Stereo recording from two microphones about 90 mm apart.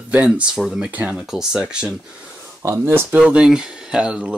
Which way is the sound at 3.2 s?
5° right (ahead or behind).